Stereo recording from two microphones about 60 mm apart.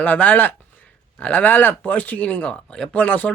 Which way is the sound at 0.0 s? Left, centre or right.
Left.